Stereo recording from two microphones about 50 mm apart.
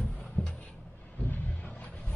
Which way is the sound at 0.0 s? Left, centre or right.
Left.